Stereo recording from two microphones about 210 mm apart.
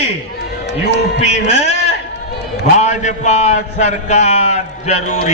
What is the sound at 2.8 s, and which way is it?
A man's voice, 35° left (ahead or behind).